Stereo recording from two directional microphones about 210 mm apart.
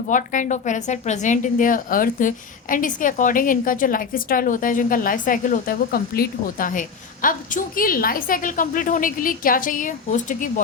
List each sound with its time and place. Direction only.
0.1 s a woman's voice: 40° left (ahead or behind)